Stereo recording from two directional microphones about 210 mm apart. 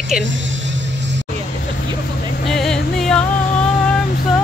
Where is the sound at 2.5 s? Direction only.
Centre (ahead or behind).